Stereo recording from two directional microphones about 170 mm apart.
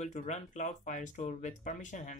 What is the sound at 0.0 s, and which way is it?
Speech, 40° left (ahead or behind).